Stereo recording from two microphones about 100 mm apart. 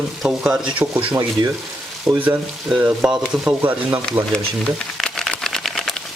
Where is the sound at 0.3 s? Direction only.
10° right (ahead or behind).